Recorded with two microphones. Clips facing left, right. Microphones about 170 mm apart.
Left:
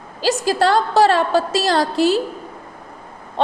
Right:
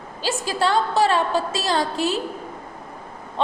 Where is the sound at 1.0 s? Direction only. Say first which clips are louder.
Left 5 dB; 90° left.